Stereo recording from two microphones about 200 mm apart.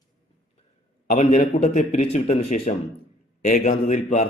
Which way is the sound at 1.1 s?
35° left (ahead or behind).